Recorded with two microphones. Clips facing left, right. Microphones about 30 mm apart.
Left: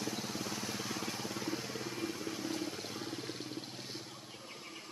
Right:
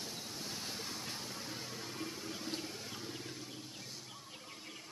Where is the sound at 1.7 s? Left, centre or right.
Left.